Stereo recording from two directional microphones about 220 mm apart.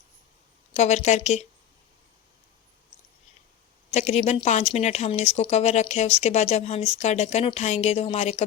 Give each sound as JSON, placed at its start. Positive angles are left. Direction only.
{"t": 0.7, "sound": "a woman's voice", "side_deg": 30}
{"t": 3.9, "sound": "speech", "side_deg": 30}